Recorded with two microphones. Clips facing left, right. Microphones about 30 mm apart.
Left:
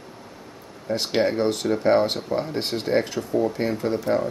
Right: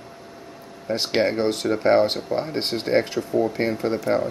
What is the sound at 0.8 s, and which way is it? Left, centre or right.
Speech, right.